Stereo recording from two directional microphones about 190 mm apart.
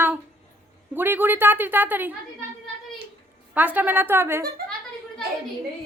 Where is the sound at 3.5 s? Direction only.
10° right (ahead or behind).